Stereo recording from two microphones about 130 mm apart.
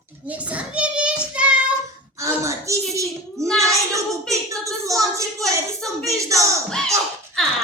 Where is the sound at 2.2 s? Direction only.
25° right (ahead or behind).